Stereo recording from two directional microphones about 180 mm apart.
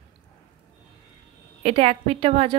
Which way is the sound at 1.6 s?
35° right (ahead or behind).